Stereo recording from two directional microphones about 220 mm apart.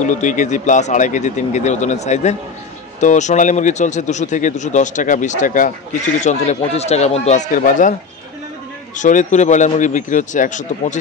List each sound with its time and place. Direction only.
0.0 s speech: 35° left (ahead or behind)
8.9 s speech: 35° left (ahead or behind)